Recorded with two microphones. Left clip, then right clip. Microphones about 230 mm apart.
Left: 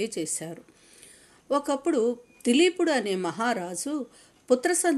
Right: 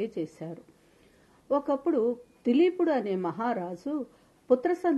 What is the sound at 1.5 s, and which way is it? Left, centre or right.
Speech, left.